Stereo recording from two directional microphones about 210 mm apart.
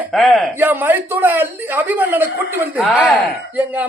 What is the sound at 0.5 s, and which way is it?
A man's voice, 10° right (ahead or behind).